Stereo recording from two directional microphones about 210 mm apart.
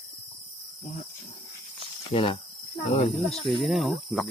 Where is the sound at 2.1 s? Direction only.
25° left (ahead or behind).